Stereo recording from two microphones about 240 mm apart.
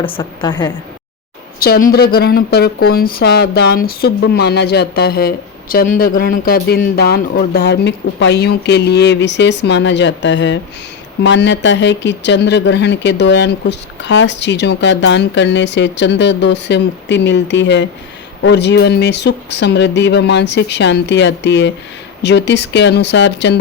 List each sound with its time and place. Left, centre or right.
0.0 s a woman's voice: left
1.6 s speech: left